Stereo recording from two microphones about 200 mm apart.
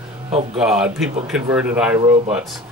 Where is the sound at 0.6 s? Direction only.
5° right (ahead or behind).